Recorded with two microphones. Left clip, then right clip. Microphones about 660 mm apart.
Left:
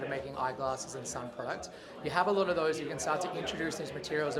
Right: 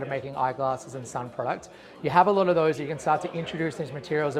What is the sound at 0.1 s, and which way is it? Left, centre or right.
Speech, right.